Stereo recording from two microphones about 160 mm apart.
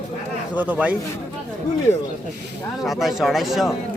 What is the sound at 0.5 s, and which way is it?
Speech, 10° right (ahead or behind).